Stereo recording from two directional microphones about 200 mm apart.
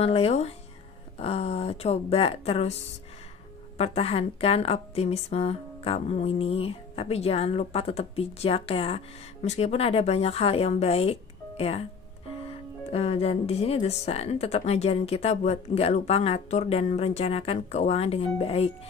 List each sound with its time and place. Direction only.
0.0 s a woman's voice: 30° left (ahead or behind)
3.7 s a woman's voice: 30° left (ahead or behind)
12.9 s a woman's voice: 30° left (ahead or behind)